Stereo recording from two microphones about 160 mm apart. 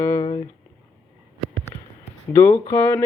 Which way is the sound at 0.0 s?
20° left (ahead or behind).